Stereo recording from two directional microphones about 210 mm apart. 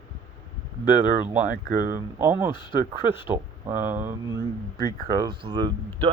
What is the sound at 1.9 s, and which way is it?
Speech, 10° right (ahead or behind).